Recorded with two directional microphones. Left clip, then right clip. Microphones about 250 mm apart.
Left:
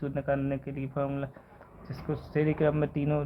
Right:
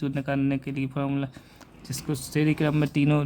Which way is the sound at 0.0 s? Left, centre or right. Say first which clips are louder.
Right 2 dB; right.